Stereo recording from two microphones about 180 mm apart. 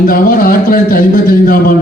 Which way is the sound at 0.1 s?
50° left (ahead or behind).